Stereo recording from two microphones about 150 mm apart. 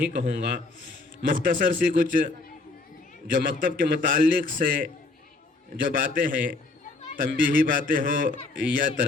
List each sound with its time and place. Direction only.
0.0 s a man's voice: 70° right (ahead or behind)